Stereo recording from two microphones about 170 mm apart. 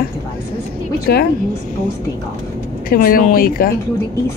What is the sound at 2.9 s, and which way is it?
Speech, 60° left (ahead or behind).